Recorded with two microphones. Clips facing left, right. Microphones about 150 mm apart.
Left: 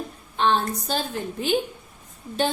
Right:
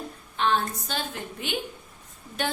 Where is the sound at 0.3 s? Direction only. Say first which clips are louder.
Left 3 dB; 30° left (ahead or behind).